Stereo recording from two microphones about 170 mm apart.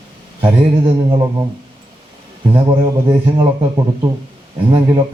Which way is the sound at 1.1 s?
20° right (ahead or behind).